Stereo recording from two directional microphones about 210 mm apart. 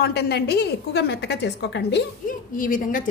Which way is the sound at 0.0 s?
50° left (ahead or behind).